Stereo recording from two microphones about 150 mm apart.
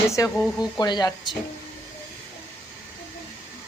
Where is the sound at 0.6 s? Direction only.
30° left (ahead or behind).